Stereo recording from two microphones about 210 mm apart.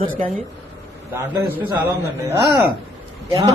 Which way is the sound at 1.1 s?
10° right (ahead or behind).